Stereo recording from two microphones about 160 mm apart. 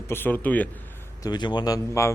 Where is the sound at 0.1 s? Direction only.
15° left (ahead or behind).